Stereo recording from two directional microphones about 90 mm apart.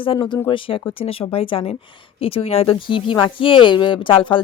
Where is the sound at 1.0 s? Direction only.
90° left.